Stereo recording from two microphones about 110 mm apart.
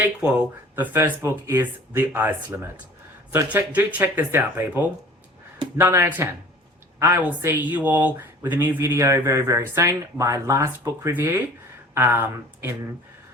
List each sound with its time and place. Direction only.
0.0 s speech: 15° right (ahead or behind)